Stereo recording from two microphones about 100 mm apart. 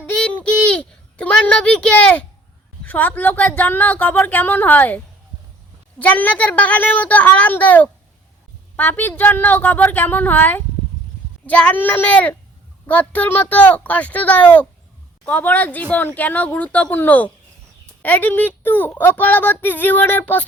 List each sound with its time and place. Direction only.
0.0 s a sound: 15° left (ahead or behind)
2.8 s speech: 20° left (ahead or behind)
6.0 s a woman's voice: 15° left (ahead or behind)